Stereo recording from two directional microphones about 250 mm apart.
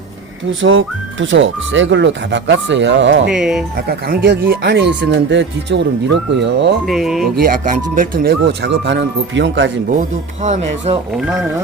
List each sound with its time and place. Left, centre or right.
0.6 s speech: right
3.2 s speech: centre
3.8 s speech: right
6.8 s speech: centre
7.3 s speech: right
10.0 s speech: right